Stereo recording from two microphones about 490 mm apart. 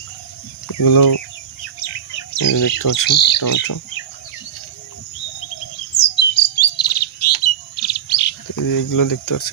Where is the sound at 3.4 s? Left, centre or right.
Left.